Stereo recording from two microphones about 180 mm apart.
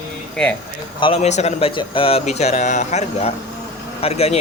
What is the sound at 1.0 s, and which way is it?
Speech, 35° left (ahead or behind).